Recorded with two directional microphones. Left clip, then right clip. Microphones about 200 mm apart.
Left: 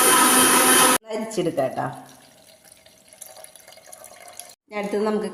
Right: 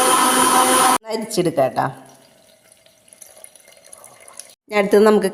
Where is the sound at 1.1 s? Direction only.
50° right (ahead or behind).